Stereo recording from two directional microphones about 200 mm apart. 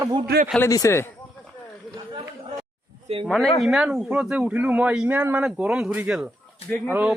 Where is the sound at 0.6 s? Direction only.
15° left (ahead or behind).